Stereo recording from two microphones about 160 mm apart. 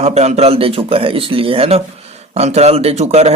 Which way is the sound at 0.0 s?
45° right (ahead or behind).